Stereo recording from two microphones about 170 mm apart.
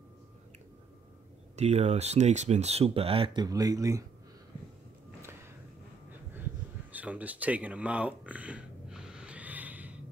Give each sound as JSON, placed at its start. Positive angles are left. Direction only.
{"t": 1.6, "sound": "speech", "side_deg": -40}
{"t": 3.4, "sound": "speech", "side_deg": -20}
{"t": 6.9, "sound": "a sound", "side_deg": -10}